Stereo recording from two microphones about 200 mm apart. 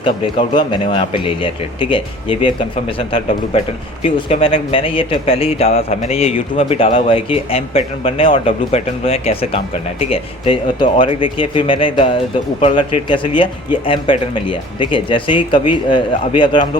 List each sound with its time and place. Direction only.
0.0 s a man's voice: 25° left (ahead or behind)